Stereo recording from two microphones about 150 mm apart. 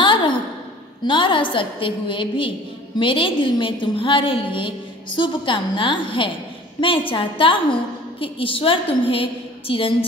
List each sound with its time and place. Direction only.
0.0 s sigh: 30° left (ahead or behind)
1.0 s a woman's voice: 35° left (ahead or behind)